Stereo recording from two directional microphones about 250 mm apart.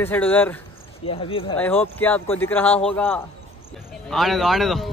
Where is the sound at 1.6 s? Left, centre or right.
Centre.